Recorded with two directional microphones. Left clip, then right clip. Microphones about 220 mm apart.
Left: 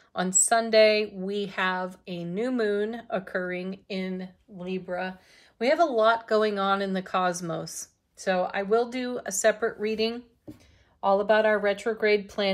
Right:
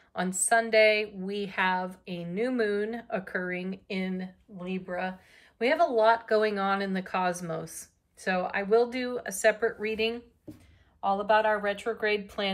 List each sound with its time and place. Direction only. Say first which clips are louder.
0.1 s a woman's voice: left 2 dB; 10° left (ahead or behind)